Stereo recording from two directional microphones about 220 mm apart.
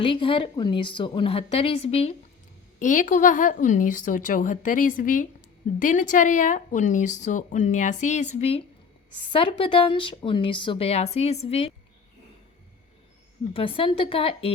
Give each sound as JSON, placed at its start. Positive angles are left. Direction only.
{"t": 0.0, "sound": "a woman's voice", "side_deg": 25}
{"t": 13.5, "sound": "a woman's voice", "side_deg": 25}